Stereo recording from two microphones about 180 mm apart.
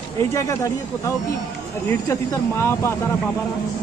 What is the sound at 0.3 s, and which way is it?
Speech, 15° left (ahead or behind).